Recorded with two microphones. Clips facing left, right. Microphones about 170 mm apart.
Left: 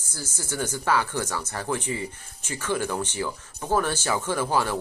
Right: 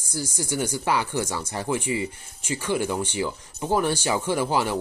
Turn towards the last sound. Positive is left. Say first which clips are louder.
# right 1 dB
turn(degrees=-15)  # may be behind; listen again after turning